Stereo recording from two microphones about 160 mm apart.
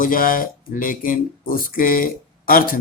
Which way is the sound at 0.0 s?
60° left (ahead or behind).